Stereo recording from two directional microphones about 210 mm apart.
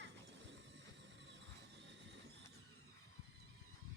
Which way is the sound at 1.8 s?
60° right (ahead or behind).